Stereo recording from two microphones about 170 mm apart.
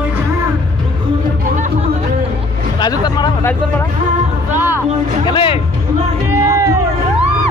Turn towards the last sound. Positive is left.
turn(degrees=-15)  # may be behind; listen again after turning